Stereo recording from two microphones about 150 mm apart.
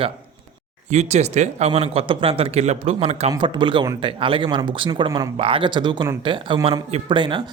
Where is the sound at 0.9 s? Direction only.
50° right (ahead or behind).